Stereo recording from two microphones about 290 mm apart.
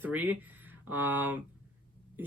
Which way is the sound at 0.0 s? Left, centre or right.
Centre.